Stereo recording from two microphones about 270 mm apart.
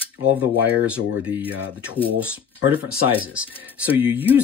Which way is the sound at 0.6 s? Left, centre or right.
Centre.